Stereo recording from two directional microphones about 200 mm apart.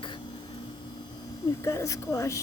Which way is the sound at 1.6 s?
15° left (ahead or behind).